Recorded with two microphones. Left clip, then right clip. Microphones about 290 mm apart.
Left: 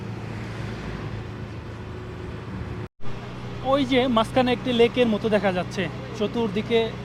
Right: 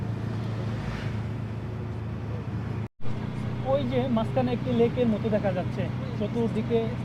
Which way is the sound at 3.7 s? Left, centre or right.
Left.